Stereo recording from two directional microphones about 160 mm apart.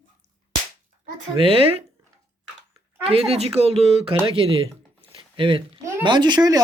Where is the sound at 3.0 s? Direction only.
35° right (ahead or behind).